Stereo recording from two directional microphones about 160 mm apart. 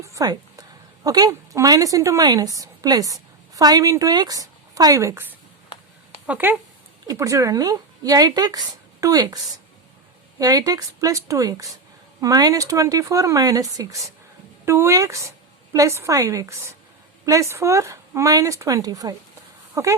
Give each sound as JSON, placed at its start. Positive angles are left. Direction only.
{"t": 0.0, "sound": "a woman's voice", "side_deg": -20}